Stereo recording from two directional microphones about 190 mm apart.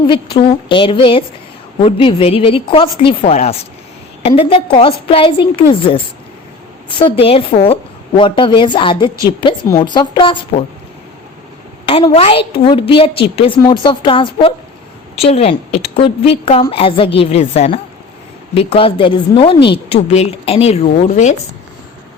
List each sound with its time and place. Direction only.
0.1 s a woman's voice: 25° left (ahead or behind)
11.9 s a woman's voice: 30° left (ahead or behind)